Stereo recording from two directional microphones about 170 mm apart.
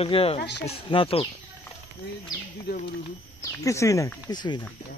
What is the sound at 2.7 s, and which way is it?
Speech, 75° left (ahead or behind).